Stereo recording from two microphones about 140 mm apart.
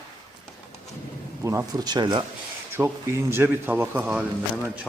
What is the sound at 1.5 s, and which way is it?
Speech, 25° right (ahead or behind).